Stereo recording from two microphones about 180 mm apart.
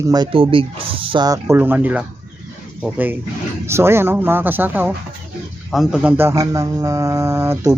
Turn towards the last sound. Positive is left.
turn(degrees=-15)  # may be behind; listen again after turning